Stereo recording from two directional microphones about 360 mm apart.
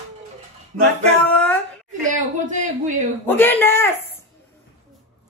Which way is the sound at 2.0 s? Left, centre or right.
Right.